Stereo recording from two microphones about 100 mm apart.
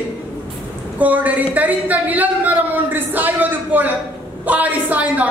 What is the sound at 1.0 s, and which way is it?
A man's voice, 15° right (ahead or behind).